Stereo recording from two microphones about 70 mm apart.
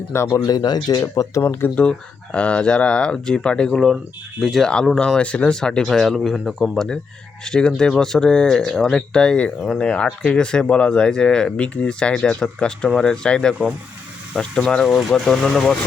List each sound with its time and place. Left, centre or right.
0.1 s speech: left
0.4 s speech: left
1.0 s speech: left
1.4 s speech: left
1.7 s speech: centre